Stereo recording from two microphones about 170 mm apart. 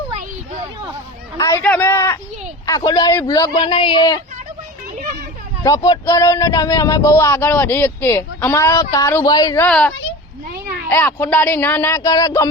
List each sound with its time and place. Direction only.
1.4 s a man's voice: 15° left (ahead or behind)
5.6 s speech: 20° left (ahead or behind)
9.6 s speech: 5° left (ahead or behind)